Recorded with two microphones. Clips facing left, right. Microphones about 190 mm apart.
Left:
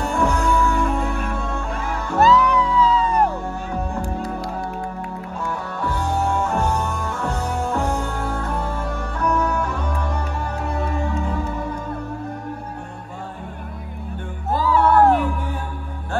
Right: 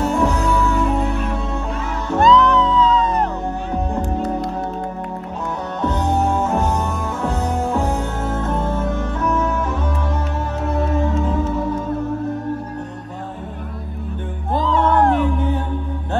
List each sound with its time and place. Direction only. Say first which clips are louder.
0.0 s music: right 3 dB; centre (ahead or behind)
1.1 s music: right 3 dB; 50° left (ahead or behind)
2.1 s music: right 2 dB; 5° left (ahead or behind)
5.8 s music: right 5 dB; 20° right (ahead or behind)
6.8 s music: right 3 dB; centre (ahead or behind)
8.0 s music: right 3 dB; 20° right (ahead or behind)
9.2 s music: left 1 dB; 5° right (ahead or behind)
14.5 s music: even; 10° left (ahead or behind)
15.3 s music: right 7 dB; 20° right (ahead or behind)